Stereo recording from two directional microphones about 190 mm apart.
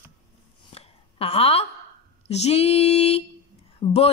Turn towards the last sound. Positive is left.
turn(degrees=30)  # may be behind; listen again after turning